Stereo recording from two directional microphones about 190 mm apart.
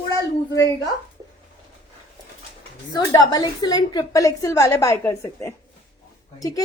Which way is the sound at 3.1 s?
20° left (ahead or behind).